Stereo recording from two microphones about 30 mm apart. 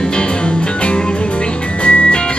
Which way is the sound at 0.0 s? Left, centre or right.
Left.